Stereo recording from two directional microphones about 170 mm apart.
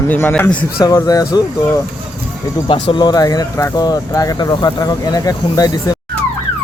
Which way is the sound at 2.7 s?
30° left (ahead or behind).